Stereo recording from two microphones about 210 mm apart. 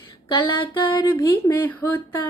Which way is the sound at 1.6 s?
10° left (ahead or behind).